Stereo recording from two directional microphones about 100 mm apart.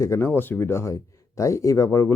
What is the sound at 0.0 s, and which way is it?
Speech, 30° left (ahead or behind).